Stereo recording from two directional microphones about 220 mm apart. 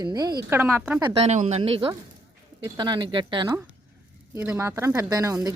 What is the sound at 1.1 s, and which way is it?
A woman's voice, 30° right (ahead or behind).